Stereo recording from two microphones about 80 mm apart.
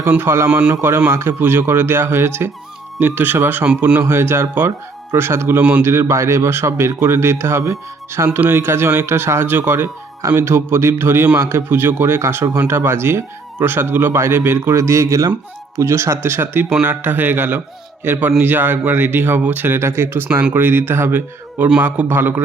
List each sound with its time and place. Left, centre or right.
0.2 s speech: right
0.4 s speech: centre
0.7 s speech: right
4.1 s speech: right
5.8 s speech: right